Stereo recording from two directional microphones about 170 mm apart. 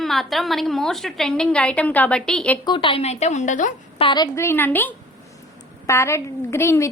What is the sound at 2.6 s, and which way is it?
A woman's voice, 30° left (ahead or behind).